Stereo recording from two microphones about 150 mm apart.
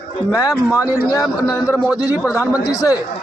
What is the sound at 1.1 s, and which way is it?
Speech, 25° left (ahead or behind).